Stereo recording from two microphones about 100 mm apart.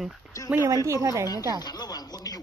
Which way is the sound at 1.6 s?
40° left (ahead or behind).